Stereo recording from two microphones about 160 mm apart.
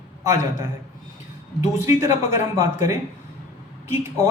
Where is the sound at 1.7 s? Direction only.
20° right (ahead or behind).